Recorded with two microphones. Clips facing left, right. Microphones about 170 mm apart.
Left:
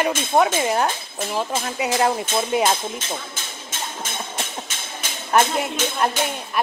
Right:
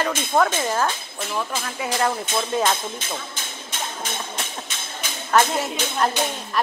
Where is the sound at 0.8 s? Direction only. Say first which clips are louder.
Left 2 dB; 30° left (ahead or behind).